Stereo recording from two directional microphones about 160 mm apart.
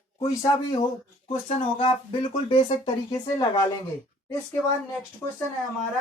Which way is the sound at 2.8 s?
25° left (ahead or behind).